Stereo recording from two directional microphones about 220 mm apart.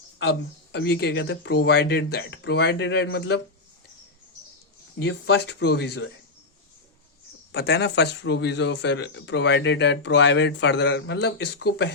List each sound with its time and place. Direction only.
0.2 s speech: 50° left (ahead or behind)
5.0 s speech: 50° left (ahead or behind)
7.5 s speech: 50° left (ahead or behind)